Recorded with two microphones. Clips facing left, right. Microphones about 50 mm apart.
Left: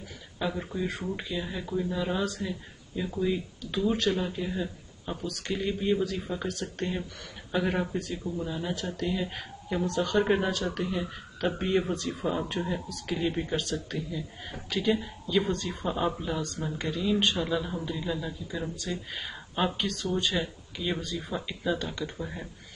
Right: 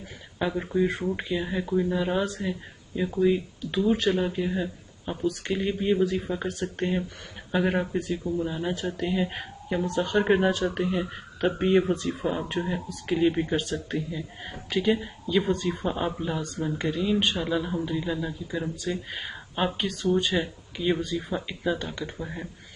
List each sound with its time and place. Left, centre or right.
0.4 s speech: centre
12.2 s speech: centre